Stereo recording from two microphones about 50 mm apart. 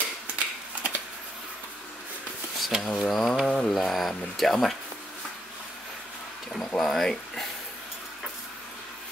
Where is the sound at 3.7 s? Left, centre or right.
Centre.